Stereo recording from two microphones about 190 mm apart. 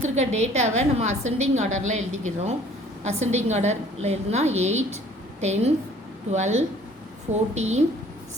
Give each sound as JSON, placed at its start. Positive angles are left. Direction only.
{"t": 0.2, "sound": "a woman's voice", "side_deg": -35}